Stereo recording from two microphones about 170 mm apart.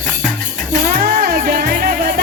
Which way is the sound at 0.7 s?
55° right (ahead or behind).